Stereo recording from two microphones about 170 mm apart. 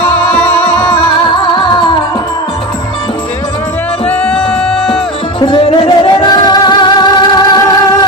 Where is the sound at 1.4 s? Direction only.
30° left (ahead or behind).